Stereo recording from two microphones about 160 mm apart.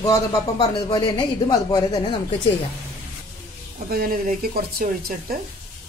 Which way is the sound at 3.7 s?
65° right (ahead or behind).